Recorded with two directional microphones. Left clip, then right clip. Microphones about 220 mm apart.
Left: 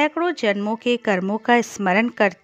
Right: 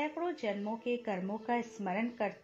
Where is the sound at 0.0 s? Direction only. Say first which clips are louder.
Left 15 dB; 50° left (ahead or behind).